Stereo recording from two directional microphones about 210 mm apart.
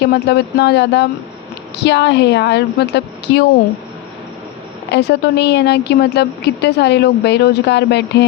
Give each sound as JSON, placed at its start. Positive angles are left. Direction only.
{"t": 0.0, "sound": "speech", "side_deg": 55}
{"t": 4.9, "sound": "speech", "side_deg": 55}